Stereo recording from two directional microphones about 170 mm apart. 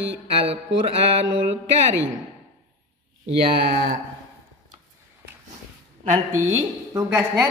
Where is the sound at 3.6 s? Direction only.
70° right (ahead or behind).